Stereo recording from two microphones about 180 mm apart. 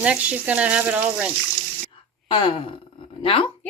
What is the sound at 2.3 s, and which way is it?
Speech, 30° left (ahead or behind).